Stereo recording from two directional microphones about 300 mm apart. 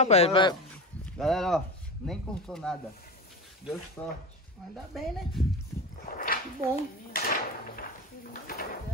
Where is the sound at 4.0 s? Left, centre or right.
Centre.